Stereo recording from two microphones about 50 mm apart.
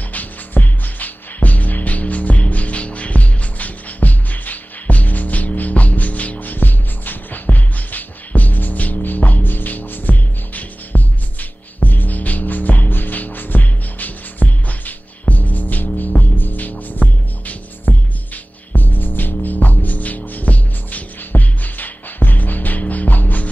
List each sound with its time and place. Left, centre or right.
0.1 s music: left